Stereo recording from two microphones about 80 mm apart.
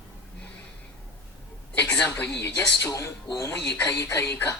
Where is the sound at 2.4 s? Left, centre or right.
Left.